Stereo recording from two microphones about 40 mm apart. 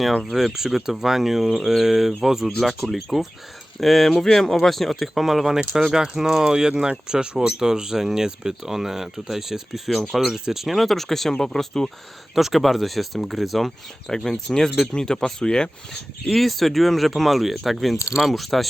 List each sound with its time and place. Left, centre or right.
0.2 s speech: centre
10.7 s speech: centre
12.3 s speech: centre
14.1 s speech: centre